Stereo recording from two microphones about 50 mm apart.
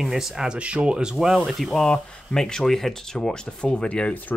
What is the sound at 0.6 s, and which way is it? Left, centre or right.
Speech, right.